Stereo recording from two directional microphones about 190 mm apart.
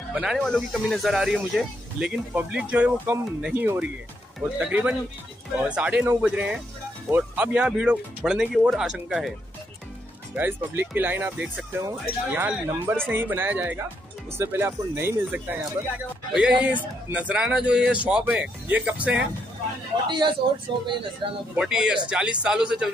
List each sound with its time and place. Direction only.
0.1 s speech: 5° right (ahead or behind)
10.3 s speech: 10° right (ahead or behind)
20.1 s speech: 25° right (ahead or behind)
21.5 s speech: 5° right (ahead or behind)